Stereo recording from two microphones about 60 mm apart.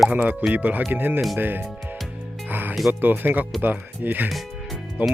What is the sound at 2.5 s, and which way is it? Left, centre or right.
Music, right.